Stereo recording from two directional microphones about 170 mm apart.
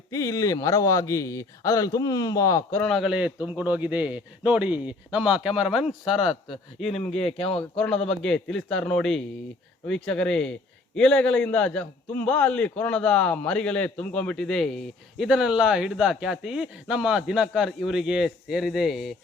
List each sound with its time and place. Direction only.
0.1 s a man's voice: 20° left (ahead or behind)
2.9 s a man's voice: 5° right (ahead or behind)
7.1 s speech: 35° left (ahead or behind)
7.8 s a man's voice: 5° left (ahead or behind)